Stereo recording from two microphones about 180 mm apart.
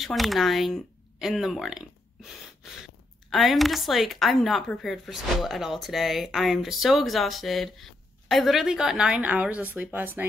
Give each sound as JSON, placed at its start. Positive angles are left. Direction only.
{"t": 0.0, "sound": "a woman's voice", "side_deg": 0}
{"t": 3.3, "sound": "a woman's voice", "side_deg": 0}